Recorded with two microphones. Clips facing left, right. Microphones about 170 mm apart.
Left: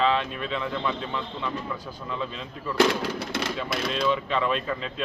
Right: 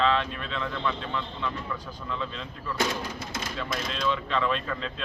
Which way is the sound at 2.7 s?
70° left (ahead or behind).